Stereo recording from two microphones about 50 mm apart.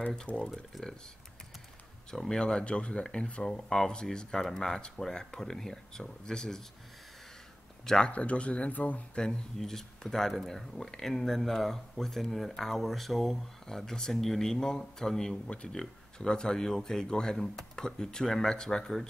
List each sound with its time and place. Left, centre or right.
0.0 s speech: centre
0.7 s speech: centre
2.0 s speech: centre
3.5 s speech: centre
7.8 s speech: centre
8.1 s speech: left
9.1 s speech: centre